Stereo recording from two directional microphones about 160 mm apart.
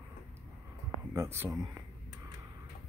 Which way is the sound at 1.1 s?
15° right (ahead or behind).